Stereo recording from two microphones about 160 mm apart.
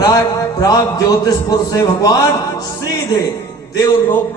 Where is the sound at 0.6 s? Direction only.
25° left (ahead or behind).